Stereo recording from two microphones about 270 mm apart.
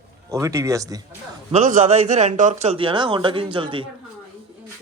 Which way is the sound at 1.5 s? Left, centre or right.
Right.